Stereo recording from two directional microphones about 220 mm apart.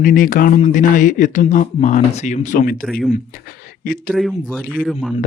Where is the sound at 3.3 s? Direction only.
40° left (ahead or behind).